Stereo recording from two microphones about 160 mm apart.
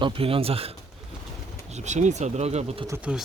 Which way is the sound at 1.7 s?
45° right (ahead or behind).